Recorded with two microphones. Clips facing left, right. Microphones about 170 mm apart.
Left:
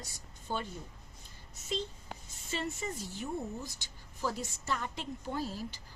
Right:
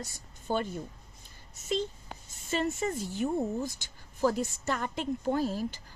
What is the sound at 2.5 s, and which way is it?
A woman's voice, 50° right (ahead or behind).